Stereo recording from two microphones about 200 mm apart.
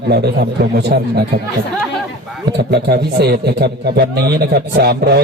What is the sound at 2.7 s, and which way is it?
A man's voice, 55° right (ahead or behind).